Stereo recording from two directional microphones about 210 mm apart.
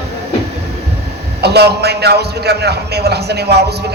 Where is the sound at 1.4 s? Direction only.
50° right (ahead or behind).